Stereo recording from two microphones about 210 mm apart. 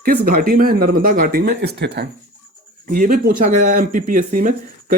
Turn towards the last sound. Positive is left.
turn(degrees=-40)  # may be behind; listen again after turning